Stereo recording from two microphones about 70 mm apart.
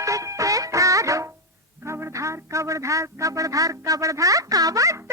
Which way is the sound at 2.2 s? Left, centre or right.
Right.